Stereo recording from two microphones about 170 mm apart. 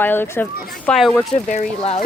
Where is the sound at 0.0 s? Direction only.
10° left (ahead or behind).